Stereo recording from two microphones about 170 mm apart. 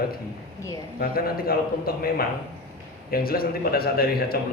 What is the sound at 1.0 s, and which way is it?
A man's voice, 60° left (ahead or behind).